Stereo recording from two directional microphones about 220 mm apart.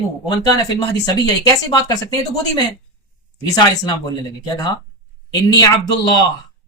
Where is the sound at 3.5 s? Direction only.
20° left (ahead or behind).